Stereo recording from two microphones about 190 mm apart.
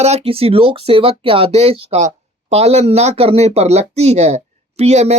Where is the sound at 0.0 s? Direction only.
35° right (ahead or behind).